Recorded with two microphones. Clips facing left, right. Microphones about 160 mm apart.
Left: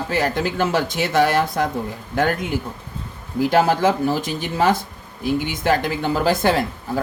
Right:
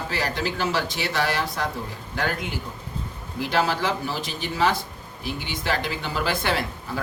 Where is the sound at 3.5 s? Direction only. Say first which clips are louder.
Left 6 dB; 50° left (ahead or behind).